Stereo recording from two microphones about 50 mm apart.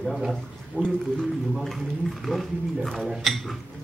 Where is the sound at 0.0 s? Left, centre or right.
Centre.